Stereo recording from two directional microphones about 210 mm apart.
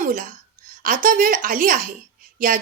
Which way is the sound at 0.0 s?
40° right (ahead or behind).